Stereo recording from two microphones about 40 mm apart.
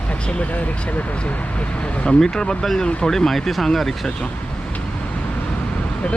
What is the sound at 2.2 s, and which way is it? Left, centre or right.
Speech, centre.